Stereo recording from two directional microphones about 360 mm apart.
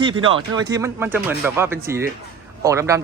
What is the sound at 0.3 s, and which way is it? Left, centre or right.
A man's voice, centre.